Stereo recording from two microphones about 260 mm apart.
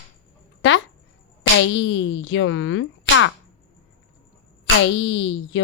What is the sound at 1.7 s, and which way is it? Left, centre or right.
Speech, left.